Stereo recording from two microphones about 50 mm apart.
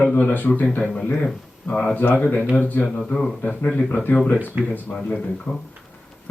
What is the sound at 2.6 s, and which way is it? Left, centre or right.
Speech, left.